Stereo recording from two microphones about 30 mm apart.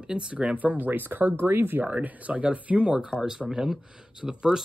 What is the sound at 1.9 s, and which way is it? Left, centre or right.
Speech, right.